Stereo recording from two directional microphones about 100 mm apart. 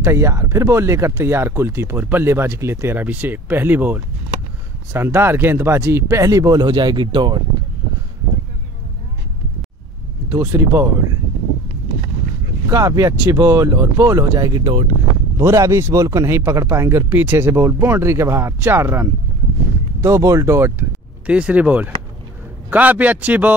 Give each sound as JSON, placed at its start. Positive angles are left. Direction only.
{"t": 0.0, "sound": "speech", "side_deg": -30}
{"t": 10.3, "sound": "speech", "side_deg": -25}
{"t": 12.6, "sound": "speech", "side_deg": -35}
{"t": 15.3, "sound": "speech", "side_deg": -30}
{"t": 21.3, "sound": "speech", "side_deg": -10}